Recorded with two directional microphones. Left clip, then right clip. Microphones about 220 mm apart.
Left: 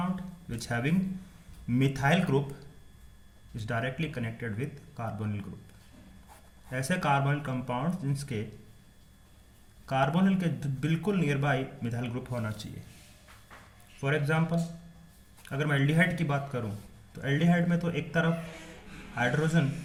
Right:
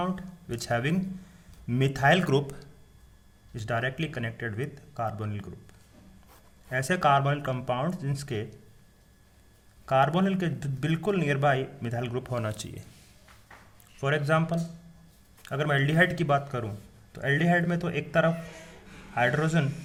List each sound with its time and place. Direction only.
0.5 s a man's voice: 50° right (ahead or behind)
3.6 s a man's voice: 50° right (ahead or behind)
6.7 s a man's voice: 50° right (ahead or behind)
10.0 s a man's voice: 50° right (ahead or behind)
14.0 s a man's voice: 50° right (ahead or behind)